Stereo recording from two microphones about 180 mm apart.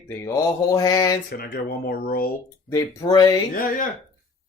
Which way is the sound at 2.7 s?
20° left (ahead or behind).